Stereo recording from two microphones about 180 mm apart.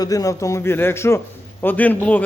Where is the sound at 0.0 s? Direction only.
20° left (ahead or behind).